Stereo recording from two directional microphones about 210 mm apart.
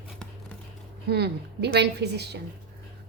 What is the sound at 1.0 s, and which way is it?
A woman's voice, 50° right (ahead or behind).